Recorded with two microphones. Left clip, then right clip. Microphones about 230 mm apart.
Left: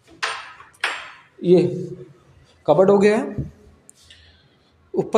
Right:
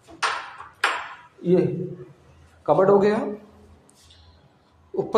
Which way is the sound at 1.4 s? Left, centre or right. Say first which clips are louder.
Left 5 dB; left.